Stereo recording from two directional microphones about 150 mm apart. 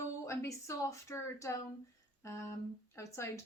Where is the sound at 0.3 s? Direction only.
20° left (ahead or behind).